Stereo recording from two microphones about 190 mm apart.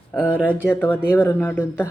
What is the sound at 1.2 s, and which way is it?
Speech, 10° left (ahead or behind).